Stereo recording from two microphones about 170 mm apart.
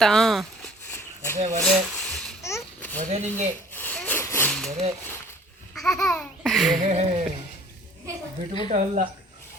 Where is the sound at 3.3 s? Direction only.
10° left (ahead or behind).